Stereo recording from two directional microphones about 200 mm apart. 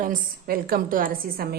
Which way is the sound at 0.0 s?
45° right (ahead or behind).